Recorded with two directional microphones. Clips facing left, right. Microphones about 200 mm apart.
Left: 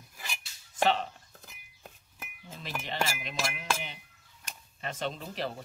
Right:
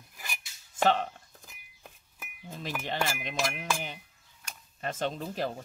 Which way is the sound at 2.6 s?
50° right (ahead or behind).